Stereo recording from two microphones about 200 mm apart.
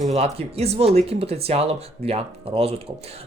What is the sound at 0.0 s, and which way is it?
Speech, 30° right (ahead or behind).